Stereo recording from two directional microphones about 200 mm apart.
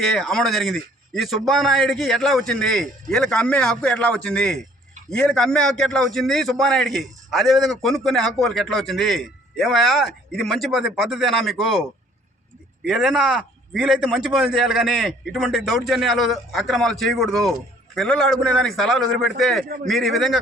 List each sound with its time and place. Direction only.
0.0 s a man's voice: centre (ahead or behind)
19.6 s a man's voice: 50° right (ahead or behind)
19.9 s a man's voice: centre (ahead or behind)